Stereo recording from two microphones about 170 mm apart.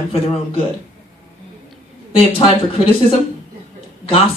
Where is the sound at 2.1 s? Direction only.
30° left (ahead or behind).